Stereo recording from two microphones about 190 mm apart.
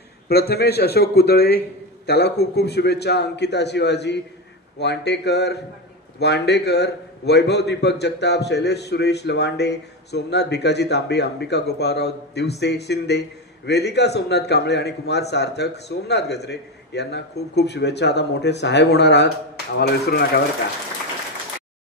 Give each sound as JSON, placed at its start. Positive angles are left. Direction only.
{"t": 0.3, "sound": "a man's voice", "side_deg": 55}